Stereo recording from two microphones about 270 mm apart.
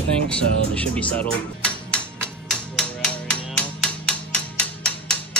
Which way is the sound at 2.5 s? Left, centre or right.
Centre.